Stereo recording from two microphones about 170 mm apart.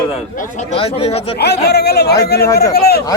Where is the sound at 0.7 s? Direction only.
35° left (ahead or behind).